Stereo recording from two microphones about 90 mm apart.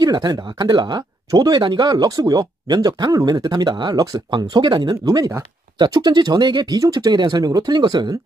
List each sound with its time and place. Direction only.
0.0 s speech: 50° right (ahead or behind)